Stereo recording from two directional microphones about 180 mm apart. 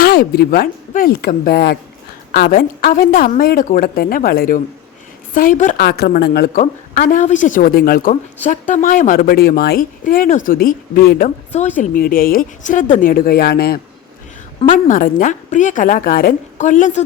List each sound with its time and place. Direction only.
0.0 s speech: 60° left (ahead or behind)
5.8 s speech: 60° left (ahead or behind)
6.6 s speech: 45° left (ahead or behind)
14.8 s speech: 50° left (ahead or behind)